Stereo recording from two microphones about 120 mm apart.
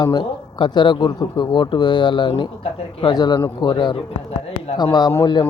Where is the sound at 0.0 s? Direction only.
35° left (ahead or behind).